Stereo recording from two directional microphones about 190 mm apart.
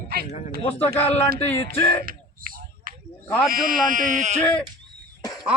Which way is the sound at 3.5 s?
50° right (ahead or behind).